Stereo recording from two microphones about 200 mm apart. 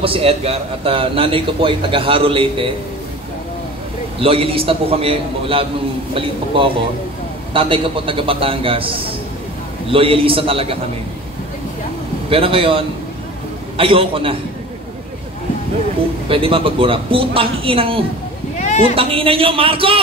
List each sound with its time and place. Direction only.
0.0 s a man's voice: 30° right (ahead or behind)
4.2 s a man's voice: 30° right (ahead or behind)
12.3 s a man's voice: 25° right (ahead or behind)
16.3 s a man's voice: 25° right (ahead or behind)
18.6 s a sound: 35° left (ahead or behind)
18.9 s a man's voice: 25° right (ahead or behind)